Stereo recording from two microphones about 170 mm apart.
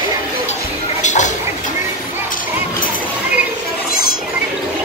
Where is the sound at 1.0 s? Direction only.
45° left (ahead or behind).